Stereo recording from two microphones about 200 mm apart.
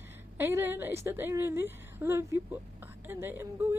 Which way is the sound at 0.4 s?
10° right (ahead or behind).